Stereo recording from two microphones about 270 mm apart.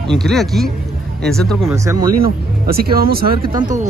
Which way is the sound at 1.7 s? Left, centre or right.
Centre.